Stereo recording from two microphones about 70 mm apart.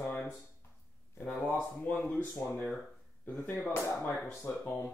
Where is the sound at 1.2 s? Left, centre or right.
Left.